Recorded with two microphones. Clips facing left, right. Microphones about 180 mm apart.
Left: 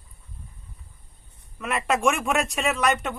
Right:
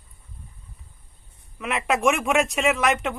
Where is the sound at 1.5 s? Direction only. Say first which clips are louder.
Right 1 dB; centre (ahead or behind).